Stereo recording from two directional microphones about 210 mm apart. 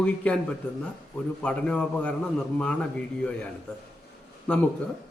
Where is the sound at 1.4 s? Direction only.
5° left (ahead or behind).